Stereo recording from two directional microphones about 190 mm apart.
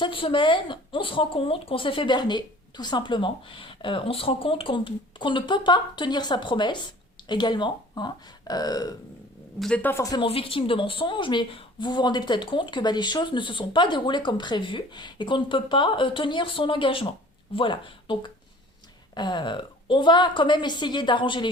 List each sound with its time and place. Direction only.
0.0 s a woman's voice: 25° left (ahead or behind)
9.6 s a woman's voice: 5° left (ahead or behind); by 21.4 s 25° left (ahead or behind)